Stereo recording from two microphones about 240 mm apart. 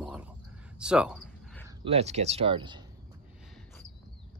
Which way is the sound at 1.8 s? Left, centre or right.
Right.